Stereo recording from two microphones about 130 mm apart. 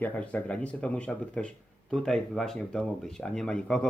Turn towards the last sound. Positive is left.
turn(degrees=5)  # may be behind; listen again after turning